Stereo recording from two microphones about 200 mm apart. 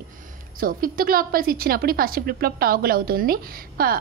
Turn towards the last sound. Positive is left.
turn(degrees=-45)  # may be behind; listen again after turning